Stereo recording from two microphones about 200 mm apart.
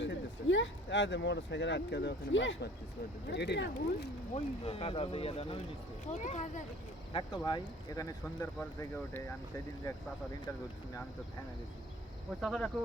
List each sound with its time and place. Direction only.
0.0 s speech: 65° left (ahead or behind)
3.2 s speech: 55° left (ahead or behind)
4.4 s speech: 30° left (ahead or behind)
7.1 s speech: 20° left (ahead or behind)
12.4 s speech: centre (ahead or behind)